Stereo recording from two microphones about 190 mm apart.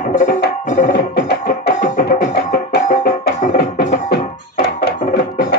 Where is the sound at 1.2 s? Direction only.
60° left (ahead or behind).